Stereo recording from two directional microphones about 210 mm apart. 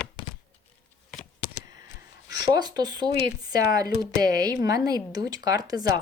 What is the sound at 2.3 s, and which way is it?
Speech, 20° right (ahead or behind).